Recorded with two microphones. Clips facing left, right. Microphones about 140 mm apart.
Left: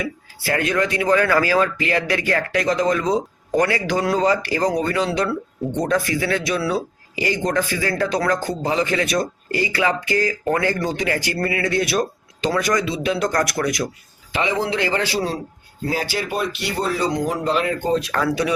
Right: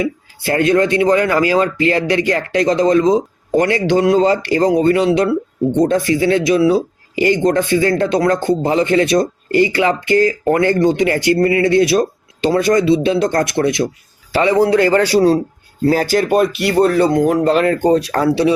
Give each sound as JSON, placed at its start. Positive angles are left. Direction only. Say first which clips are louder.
{"t": 0.0, "sound": "speech", "louder": "right 7 dB", "side_deg": -25}
{"t": 14.3, "sound": "speech", "louder": "right 9 dB", "side_deg": -45}
{"t": 15.1, "sound": "speech", "louder": "right 12 dB", "side_deg": -35}
{"t": 15.9, "sound": "speech", "louder": "right 10 dB", "side_deg": -45}
{"t": 16.6, "sound": "speech", "louder": "right 10 dB", "side_deg": -60}